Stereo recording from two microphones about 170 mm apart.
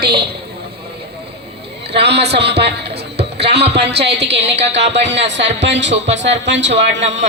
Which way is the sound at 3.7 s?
80° right.